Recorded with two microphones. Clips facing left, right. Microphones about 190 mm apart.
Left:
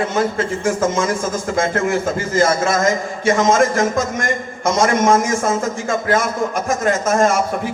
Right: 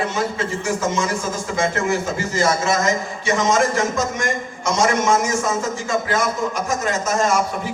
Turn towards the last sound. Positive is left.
turn(degrees=50)  # may be behind; listen again after turning